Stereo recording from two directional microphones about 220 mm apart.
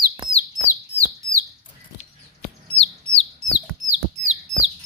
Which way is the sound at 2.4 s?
30° left (ahead or behind).